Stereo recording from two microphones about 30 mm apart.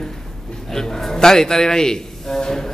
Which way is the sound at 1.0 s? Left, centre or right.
Centre.